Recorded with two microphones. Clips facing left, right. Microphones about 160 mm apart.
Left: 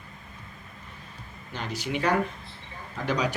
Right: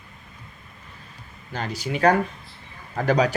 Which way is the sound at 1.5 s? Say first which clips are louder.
Right 3 dB; 35° right (ahead or behind).